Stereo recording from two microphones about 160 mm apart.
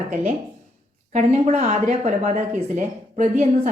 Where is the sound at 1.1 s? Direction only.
45° right (ahead or behind).